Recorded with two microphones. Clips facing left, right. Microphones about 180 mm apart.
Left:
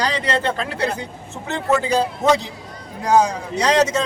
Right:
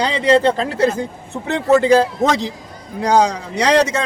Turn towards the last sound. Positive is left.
turn(degrees=-65)  # may be behind; listen again after turning